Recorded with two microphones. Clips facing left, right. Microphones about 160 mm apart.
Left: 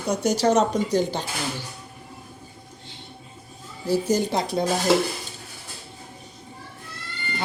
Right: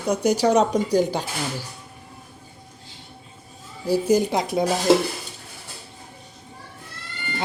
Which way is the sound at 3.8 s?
10° right (ahead or behind).